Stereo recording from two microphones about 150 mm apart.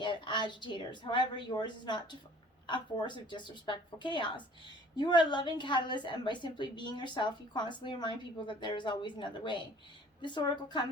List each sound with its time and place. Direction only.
0.0 s a woman's voice: 30° left (ahead or behind)